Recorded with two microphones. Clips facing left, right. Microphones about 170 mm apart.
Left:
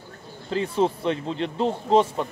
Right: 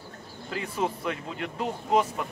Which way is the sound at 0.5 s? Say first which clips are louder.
Left 7 dB; 30° left (ahead or behind).